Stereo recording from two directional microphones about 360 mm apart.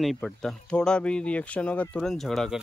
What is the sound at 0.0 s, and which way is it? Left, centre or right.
Speech, centre.